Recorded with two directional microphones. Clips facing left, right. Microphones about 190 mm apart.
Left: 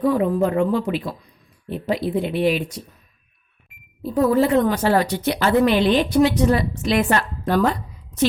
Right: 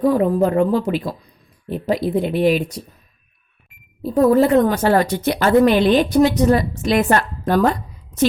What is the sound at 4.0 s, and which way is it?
Speech, 40° right (ahead or behind).